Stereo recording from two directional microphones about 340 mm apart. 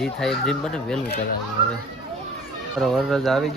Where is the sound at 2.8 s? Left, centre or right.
Centre.